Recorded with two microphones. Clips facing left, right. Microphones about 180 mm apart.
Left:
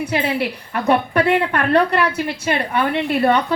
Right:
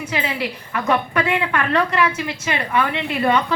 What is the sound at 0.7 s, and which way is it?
Speech, 35° left (ahead or behind).